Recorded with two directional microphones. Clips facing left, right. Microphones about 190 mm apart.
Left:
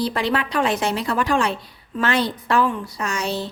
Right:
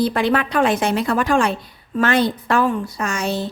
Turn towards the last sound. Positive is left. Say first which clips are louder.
# right 2 dB
turn(degrees=-50)  # may be behind; listen again after turning